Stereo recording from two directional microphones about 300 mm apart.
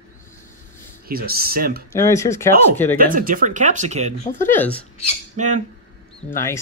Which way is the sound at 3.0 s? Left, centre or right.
Right.